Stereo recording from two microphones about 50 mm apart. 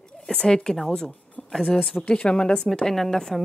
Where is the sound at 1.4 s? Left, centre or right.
Left.